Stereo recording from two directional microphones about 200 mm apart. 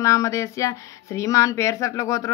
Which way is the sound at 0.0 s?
15° left (ahead or behind).